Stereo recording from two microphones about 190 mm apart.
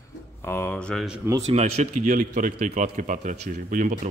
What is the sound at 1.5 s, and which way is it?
Speech, 35° right (ahead or behind).